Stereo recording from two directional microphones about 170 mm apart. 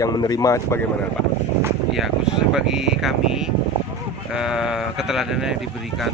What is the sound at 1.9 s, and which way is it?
Speech, 5° right (ahead or behind).